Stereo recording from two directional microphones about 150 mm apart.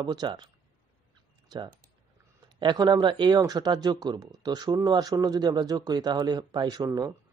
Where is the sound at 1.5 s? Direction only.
30° right (ahead or behind).